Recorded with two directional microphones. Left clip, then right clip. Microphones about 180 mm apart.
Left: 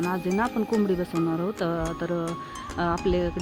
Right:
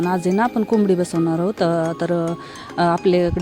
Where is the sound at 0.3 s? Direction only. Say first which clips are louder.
Right 7 dB; 45° right (ahead or behind).